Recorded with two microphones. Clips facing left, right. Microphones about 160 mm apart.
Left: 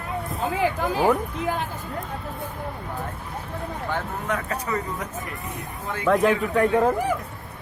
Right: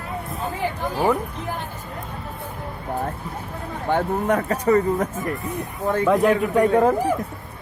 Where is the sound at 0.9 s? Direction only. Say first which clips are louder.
Right 1 dB; 10° left (ahead or behind).